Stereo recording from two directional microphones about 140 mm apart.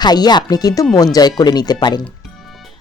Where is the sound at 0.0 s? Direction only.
30° left (ahead or behind).